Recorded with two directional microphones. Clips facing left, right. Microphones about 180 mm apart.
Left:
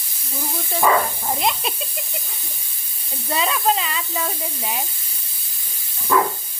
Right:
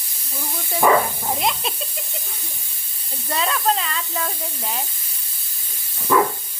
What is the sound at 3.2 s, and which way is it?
Speech, 5° left (ahead or behind).